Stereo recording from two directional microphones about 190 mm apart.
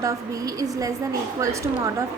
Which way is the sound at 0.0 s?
15° right (ahead or behind).